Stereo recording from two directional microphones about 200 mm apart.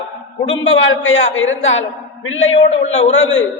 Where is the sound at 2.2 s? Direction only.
85° left.